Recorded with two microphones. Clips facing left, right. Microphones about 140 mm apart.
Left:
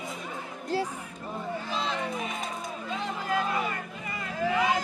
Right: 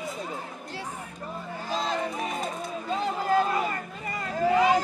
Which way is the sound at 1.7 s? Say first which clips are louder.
Right 5 dB; 40° right (ahead or behind).